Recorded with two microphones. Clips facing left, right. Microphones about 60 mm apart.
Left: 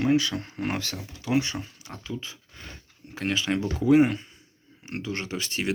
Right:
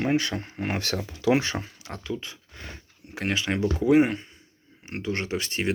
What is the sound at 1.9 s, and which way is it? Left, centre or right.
Speech, right.